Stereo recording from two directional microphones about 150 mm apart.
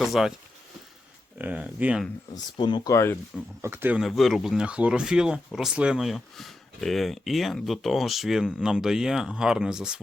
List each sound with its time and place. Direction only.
0.0 s speech: centre (ahead or behind)
1.4 s speech: 10° right (ahead or behind)
2.3 s speech: 30° left (ahead or behind)
3.6 s speech: 15° right (ahead or behind)
4.0 s speech: centre (ahead or behind)